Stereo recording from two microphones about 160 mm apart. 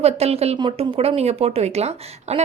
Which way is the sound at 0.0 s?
40° right (ahead or behind).